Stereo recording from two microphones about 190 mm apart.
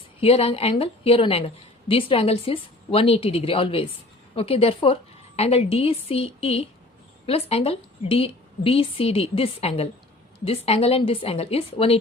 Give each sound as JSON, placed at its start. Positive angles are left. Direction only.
{"t": 0.2, "sound": "a woman's voice", "side_deg": 30}